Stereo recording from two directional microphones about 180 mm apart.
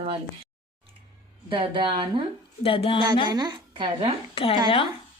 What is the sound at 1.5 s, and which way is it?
Speech, 30° right (ahead or behind).